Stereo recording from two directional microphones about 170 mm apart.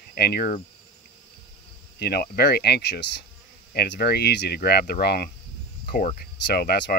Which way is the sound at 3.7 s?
70° left (ahead or behind).